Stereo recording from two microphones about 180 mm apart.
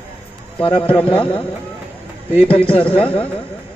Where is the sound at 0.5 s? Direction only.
30° left (ahead or behind).